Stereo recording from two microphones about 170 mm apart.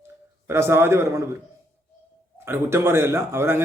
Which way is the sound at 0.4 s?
15° right (ahead or behind).